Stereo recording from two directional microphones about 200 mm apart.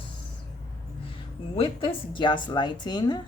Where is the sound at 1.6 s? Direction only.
25° left (ahead or behind).